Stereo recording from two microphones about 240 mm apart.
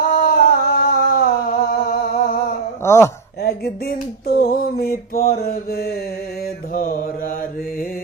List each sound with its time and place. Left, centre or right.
0.1 s humming: left
2.8 s speech: centre
3.4 s a sound: left